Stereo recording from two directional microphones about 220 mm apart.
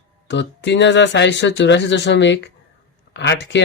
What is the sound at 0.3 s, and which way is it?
Speech, 55° left (ahead or behind).